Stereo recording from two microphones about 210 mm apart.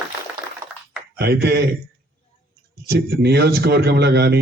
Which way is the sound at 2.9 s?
50° right (ahead or behind).